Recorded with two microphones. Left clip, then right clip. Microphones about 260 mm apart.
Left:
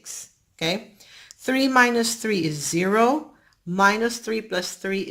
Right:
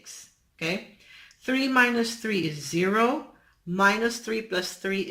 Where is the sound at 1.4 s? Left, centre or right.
Centre.